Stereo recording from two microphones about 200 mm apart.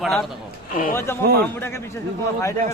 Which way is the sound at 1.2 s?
50° right (ahead or behind).